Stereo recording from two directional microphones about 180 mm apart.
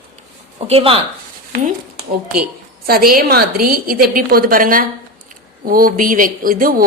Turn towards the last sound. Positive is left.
turn(degrees=-50)  # may be behind; listen again after turning